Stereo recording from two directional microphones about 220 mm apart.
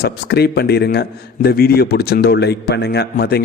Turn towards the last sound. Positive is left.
turn(degrees=45)  # may be behind; listen again after turning